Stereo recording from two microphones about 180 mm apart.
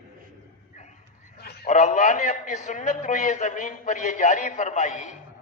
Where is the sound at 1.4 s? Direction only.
60° left (ahead or behind).